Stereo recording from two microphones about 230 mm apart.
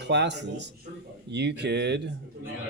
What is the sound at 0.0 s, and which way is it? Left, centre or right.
Speech, right.